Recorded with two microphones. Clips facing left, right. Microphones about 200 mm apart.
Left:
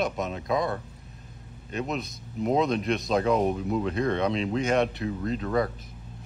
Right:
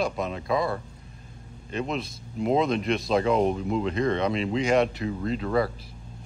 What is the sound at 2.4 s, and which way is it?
Speech, centre (ahead or behind).